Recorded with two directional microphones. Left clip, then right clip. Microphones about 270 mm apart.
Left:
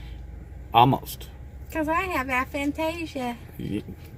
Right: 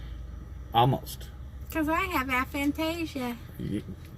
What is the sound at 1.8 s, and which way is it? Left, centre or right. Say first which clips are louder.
A woman's voice: left 2 dB; centre.